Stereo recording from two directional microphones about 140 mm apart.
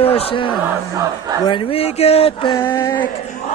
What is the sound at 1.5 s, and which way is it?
Speech, 40° left (ahead or behind).